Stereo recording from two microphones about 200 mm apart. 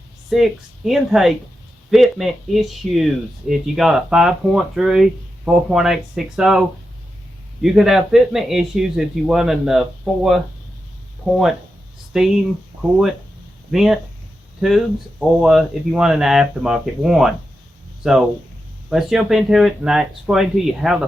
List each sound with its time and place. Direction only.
0.3 s speech: centre (ahead or behind)
12.1 s speech: centre (ahead or behind)
12.7 s speech: 40° right (ahead or behind)
13.7 s speech: centre (ahead or behind)